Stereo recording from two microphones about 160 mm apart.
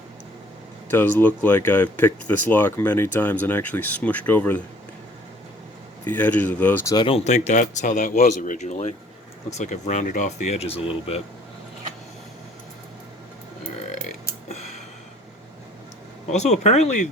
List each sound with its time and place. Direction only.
0.9 s speech: 10° left (ahead or behind)
6.1 s speech: 10° left (ahead or behind)
6.9 s speech: 30° left (ahead or behind)
7.3 s speech: 45° left (ahead or behind)
16.3 s speech: 45° left (ahead or behind)